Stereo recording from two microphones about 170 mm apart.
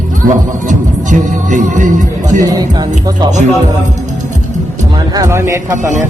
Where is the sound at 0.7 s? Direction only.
45° right (ahead or behind).